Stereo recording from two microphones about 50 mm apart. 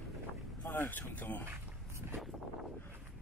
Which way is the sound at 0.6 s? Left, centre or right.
Left.